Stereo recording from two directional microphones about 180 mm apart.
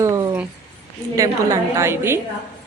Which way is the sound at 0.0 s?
15° right (ahead or behind).